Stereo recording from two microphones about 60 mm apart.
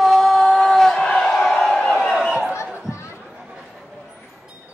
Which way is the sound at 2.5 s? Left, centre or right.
Left.